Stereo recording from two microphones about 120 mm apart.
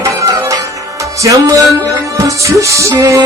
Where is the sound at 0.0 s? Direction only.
30° right (ahead or behind).